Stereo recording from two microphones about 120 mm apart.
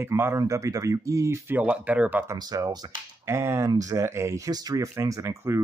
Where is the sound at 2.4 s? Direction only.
30° right (ahead or behind).